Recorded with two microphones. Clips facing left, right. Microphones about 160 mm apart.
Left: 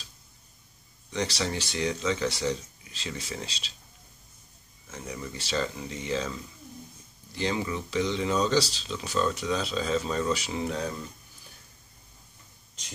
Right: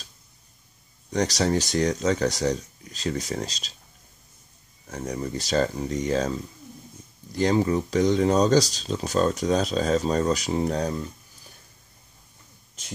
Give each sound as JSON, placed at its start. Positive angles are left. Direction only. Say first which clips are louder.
{"t": 1.1, "sound": "speech", "louder": "right 7 dB", "side_deg": -40}
{"t": 4.8, "sound": "speech", "louder": "right 7 dB", "side_deg": -40}